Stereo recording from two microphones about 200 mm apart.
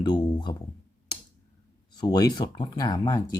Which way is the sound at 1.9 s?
20° left (ahead or behind).